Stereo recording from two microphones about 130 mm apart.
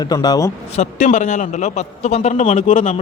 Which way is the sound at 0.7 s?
65° left (ahead or behind).